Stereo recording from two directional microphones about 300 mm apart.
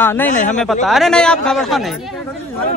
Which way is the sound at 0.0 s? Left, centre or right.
Centre.